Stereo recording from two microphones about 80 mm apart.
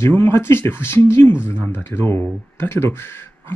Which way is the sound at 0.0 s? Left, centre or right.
Left.